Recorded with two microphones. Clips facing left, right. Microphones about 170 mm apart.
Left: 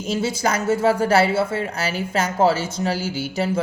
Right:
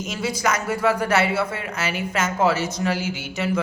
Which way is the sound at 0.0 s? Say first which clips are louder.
Left 3 dB; 30° left (ahead or behind).